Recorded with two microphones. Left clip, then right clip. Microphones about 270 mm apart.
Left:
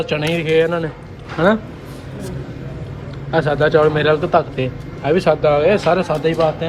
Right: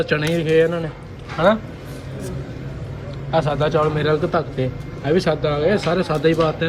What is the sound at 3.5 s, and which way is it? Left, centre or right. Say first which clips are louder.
A man's voice: left 5 dB; left.